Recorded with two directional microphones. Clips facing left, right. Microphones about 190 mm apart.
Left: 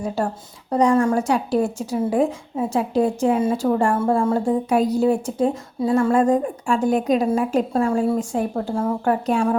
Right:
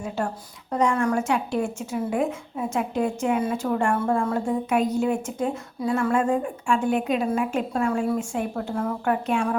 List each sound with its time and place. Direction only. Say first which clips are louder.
0.2 s speech: left 4 dB; 35° left (ahead or behind)